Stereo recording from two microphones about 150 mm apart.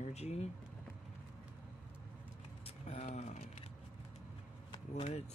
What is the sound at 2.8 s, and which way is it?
Speech, 50° left (ahead or behind).